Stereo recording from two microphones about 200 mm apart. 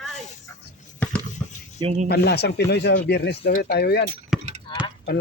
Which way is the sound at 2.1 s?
55° left (ahead or behind).